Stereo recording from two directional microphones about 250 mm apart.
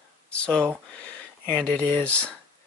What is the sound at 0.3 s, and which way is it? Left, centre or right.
Speech, centre.